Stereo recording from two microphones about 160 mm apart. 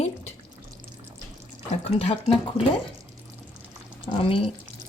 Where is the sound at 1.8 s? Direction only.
35° left (ahead or behind).